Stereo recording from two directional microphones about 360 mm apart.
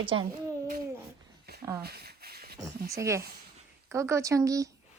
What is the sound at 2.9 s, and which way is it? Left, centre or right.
A woman's voice, centre.